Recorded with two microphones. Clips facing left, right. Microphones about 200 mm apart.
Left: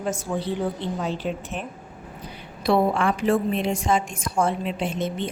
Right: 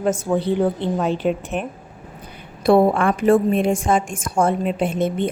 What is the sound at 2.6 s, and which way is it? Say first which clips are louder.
A woman's voice: right 6 dB; 50° right (ahead or behind).